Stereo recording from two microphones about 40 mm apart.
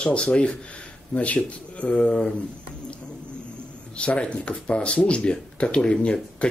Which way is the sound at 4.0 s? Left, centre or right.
Left.